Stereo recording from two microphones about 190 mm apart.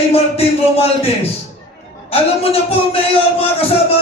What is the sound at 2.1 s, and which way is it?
A man's voice, 30° left (ahead or behind).